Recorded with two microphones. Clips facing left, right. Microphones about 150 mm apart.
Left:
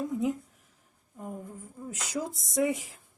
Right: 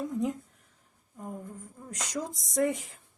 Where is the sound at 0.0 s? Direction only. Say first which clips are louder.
Left 1 dB; centre (ahead or behind).